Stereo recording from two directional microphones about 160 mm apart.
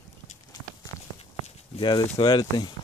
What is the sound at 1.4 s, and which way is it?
Speech, 40° left (ahead or behind).